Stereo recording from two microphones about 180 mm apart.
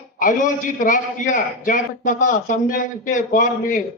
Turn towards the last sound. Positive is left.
turn(degrees=50)  # may be behind; listen again after turning